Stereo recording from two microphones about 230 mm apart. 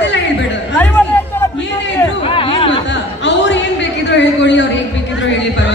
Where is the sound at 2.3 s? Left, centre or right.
Left.